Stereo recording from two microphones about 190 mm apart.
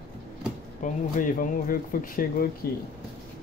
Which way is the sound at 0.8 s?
45° left (ahead or behind).